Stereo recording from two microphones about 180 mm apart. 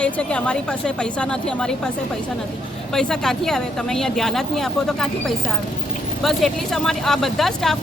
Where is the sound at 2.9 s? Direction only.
5° left (ahead or behind).